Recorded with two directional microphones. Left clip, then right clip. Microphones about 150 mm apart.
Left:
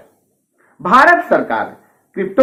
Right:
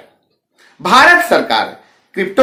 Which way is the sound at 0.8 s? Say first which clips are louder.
Right 2 dB; 30° right (ahead or behind).